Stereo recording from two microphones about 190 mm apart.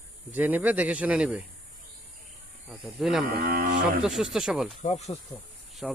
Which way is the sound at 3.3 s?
55° right (ahead or behind).